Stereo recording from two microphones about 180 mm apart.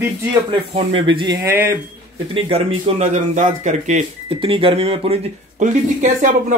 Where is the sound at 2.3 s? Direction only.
30° right (ahead or behind).